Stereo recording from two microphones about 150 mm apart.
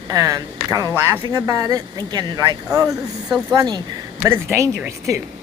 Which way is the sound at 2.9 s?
Centre (ahead or behind).